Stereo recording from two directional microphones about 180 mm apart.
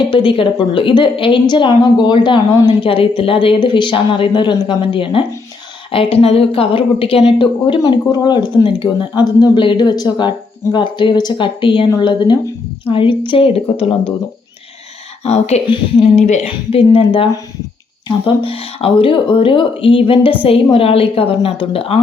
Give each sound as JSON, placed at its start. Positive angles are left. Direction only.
{"t": 0.1, "sound": "a woman's voice", "side_deg": 30}
{"t": 15.2, "sound": "a woman's voice", "side_deg": 35}